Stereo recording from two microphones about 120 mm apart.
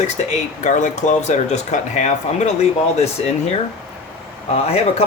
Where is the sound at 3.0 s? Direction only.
65° left (ahead or behind).